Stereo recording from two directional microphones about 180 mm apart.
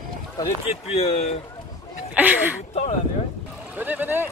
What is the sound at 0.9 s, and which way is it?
Speech, 35° left (ahead or behind).